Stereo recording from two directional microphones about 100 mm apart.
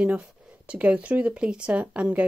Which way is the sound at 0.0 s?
10° right (ahead or behind).